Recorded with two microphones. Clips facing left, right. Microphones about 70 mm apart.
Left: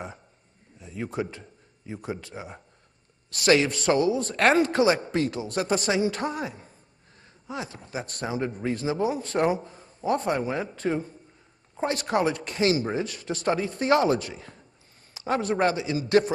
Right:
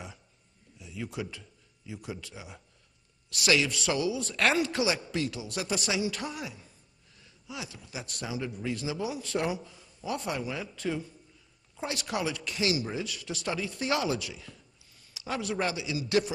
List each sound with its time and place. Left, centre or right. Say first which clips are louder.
0.7 s a man's voice: left 6 dB; left